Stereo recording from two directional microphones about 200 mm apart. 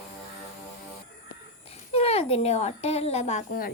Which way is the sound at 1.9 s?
30° left (ahead or behind).